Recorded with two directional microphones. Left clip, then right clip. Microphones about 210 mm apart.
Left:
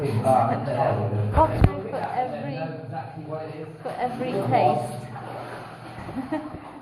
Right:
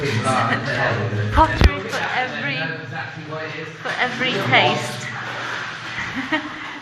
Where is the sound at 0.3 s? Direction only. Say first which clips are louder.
Right 2 dB; 45° right (ahead or behind).